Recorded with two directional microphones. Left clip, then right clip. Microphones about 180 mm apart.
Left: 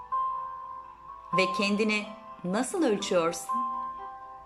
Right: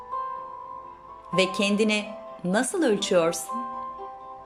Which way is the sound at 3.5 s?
35° right (ahead or behind).